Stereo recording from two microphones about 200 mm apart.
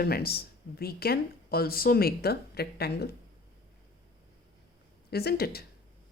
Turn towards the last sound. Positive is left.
turn(degrees=50)  # may be behind; listen again after turning